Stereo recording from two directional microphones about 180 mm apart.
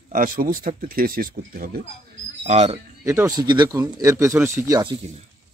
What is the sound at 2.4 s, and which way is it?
Speech, 35° right (ahead or behind).